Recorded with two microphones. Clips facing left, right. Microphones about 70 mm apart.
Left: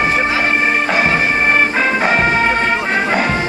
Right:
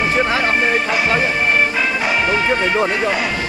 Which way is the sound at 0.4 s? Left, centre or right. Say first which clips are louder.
Left 1 dB; left.